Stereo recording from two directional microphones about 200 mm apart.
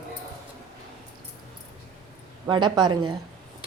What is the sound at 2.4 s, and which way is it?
Speech, 25° right (ahead or behind).